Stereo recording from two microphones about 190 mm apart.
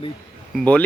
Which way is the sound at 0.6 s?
5° left (ahead or behind).